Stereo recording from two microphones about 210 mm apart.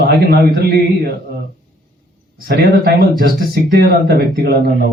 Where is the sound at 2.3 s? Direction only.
45° right (ahead or behind).